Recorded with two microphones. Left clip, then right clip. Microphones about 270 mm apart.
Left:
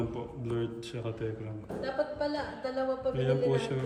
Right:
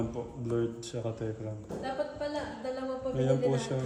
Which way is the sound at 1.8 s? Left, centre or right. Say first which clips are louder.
Left 3 dB; left.